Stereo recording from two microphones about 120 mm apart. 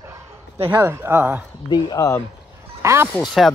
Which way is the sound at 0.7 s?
20° right (ahead or behind).